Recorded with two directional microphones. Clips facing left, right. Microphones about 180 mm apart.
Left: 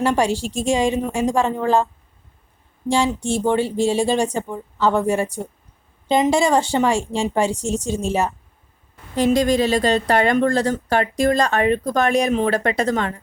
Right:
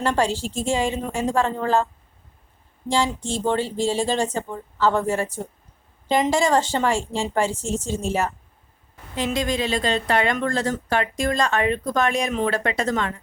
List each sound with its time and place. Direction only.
0.0 s speech: 10° left (ahead or behind)
2.9 s speech: 15° left (ahead or behind)
9.1 s speech: 40° left (ahead or behind)